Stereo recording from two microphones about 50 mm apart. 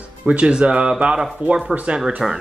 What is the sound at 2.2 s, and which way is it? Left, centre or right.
Speech, centre.